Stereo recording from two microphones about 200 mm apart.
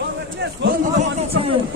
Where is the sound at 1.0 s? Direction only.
30° right (ahead or behind).